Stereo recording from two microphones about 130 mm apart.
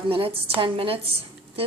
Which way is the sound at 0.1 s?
45° right (ahead or behind).